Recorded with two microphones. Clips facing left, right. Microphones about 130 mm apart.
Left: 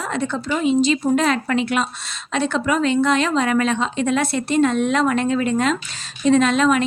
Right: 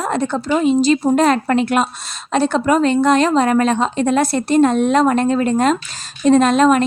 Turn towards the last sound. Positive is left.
turn(degrees=-40)  # may be behind; listen again after turning